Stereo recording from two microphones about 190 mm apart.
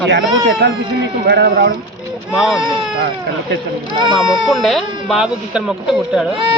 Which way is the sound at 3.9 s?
25° right (ahead or behind).